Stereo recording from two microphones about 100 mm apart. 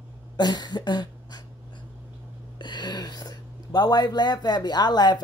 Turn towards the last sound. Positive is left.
turn(degrees=45)  # may be behind; listen again after turning